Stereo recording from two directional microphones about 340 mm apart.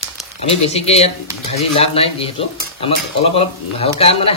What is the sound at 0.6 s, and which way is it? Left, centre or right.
Cutlery, centre.